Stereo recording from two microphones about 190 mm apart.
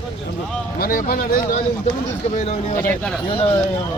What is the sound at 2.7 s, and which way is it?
Speech, 10° left (ahead or behind).